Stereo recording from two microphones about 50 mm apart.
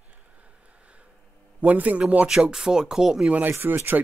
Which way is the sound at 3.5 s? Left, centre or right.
Right.